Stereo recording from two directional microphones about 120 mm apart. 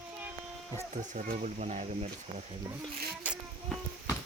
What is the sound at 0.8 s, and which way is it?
Speech, 90° right.